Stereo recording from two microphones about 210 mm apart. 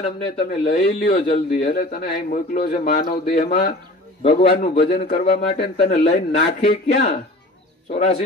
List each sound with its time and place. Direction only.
0.4 s a man's voice: 40° left (ahead or behind)
3.3 s a man's voice: 30° left (ahead or behind)
5.5 s a man's voice: 30° left (ahead or behind)